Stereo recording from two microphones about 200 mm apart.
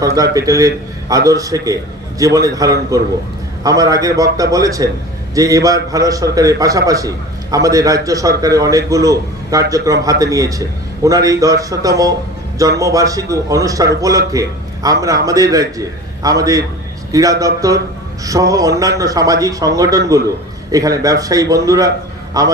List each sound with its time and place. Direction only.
0.0 s a man's voice: 15° right (ahead or behind)